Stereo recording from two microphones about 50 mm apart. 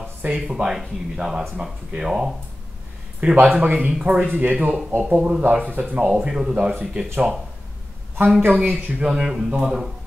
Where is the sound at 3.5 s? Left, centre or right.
Right.